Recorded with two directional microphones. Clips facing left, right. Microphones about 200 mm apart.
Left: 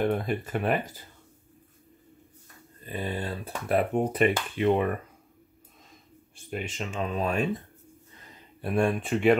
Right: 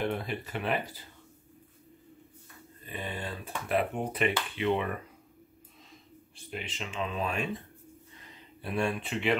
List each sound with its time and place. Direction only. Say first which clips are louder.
0.0 s speech: left 6 dB; 45° left (ahead or behind)
2.8 s speech: left 5 dB; 40° left (ahead or behind)
6.3 s speech: left 6 dB; 45° left (ahead or behind)
8.5 s speech: left 6 dB; 50° left (ahead or behind)